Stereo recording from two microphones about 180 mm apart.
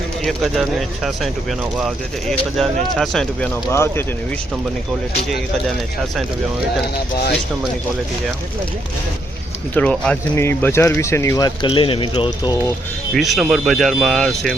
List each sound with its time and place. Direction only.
0.2 s speech: centre (ahead or behind)
6.9 s speech: 65° left (ahead or behind)
9.7 s speech: 5° left (ahead or behind); by 12.7 s 25° left (ahead or behind)
13.1 s speech: centre (ahead or behind)